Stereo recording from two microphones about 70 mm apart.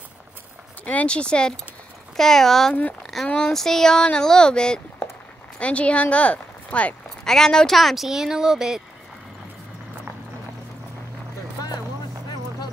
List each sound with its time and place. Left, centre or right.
0.8 s speech: centre
3.0 s a sound: centre
3.3 s speech: centre
7.2 s speech: centre